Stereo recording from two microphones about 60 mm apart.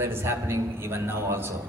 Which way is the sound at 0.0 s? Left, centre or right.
Right.